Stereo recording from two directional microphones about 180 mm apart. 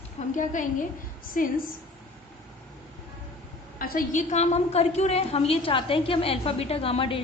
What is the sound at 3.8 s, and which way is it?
A woman's voice, 50° left (ahead or behind).